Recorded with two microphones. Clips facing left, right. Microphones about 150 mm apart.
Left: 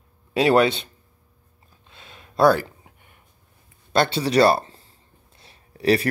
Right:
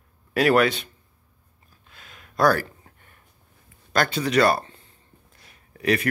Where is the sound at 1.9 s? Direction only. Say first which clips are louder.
Left 3 dB; 25° left (ahead or behind).